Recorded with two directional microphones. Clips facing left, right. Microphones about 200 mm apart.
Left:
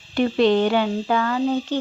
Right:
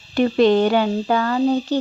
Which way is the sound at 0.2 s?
45° right (ahead or behind).